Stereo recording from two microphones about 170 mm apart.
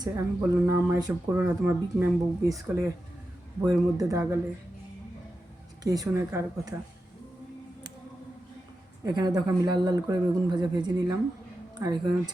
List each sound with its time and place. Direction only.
0.0 s speech: 20° right (ahead or behind)
5.8 s speech: 20° right (ahead or behind)
9.0 s speech: 25° right (ahead or behind)